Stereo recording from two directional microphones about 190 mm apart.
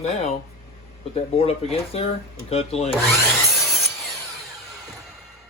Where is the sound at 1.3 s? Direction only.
30° left (ahead or behind).